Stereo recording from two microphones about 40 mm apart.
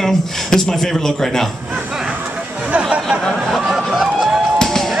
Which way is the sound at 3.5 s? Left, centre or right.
Centre.